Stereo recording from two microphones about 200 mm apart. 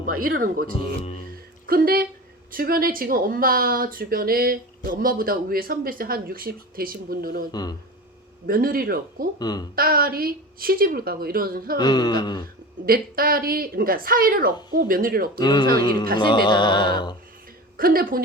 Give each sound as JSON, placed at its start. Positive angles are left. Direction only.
{"t": 0.2, "sound": "speech", "side_deg": -45}
{"t": 0.7, "sound": "speech", "side_deg": 25}
{"t": 1.6, "sound": "speech", "side_deg": -50}
{"t": 7.5, "sound": "speech", "side_deg": 20}
{"t": 8.4, "sound": "speech", "side_deg": -45}
{"t": 9.4, "sound": "speech", "side_deg": 20}
{"t": 9.7, "sound": "speech", "side_deg": -45}
{"t": 11.8, "sound": "speech", "side_deg": 20}
{"t": 12.8, "sound": "speech", "side_deg": -45}
{"t": 15.4, "sound": "speech", "side_deg": 20}
{"t": 17.7, "sound": "speech", "side_deg": -45}